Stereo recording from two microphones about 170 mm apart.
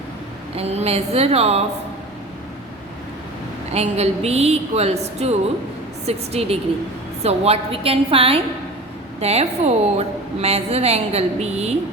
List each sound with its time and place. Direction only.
0.5 s a woman's voice: 40° right (ahead or behind)
3.7 s a woman's voice: 40° right (ahead or behind)